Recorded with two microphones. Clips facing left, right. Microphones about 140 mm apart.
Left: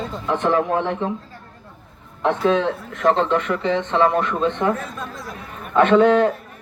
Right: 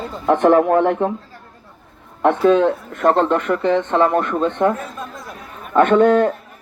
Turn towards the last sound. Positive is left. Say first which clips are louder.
# right 1 dB
turn(degrees=-50)  # may be behind; listen again after turning